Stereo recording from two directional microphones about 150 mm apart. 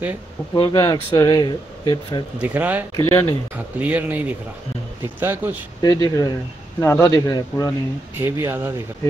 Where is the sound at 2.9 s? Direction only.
25° left (ahead or behind).